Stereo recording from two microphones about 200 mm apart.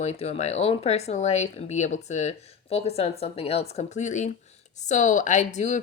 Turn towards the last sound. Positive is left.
turn(degrees=35)  # may be behind; listen again after turning